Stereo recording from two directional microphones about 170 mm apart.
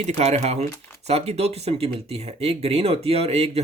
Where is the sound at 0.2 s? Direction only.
40° right (ahead or behind).